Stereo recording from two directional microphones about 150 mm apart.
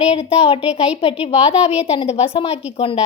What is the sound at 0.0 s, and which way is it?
A child's voice, 45° left (ahead or behind).